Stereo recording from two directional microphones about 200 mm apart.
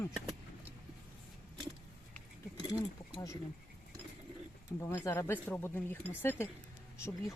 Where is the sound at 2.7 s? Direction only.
15° left (ahead or behind).